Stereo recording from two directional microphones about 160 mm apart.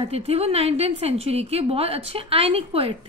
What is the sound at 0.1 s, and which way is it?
A woman's voice, 40° right (ahead or behind).